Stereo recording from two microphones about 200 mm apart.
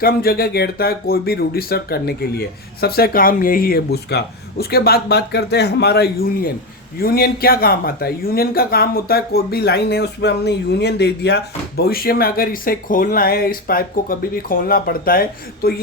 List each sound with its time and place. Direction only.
0.0 s speech: 50° left (ahead or behind)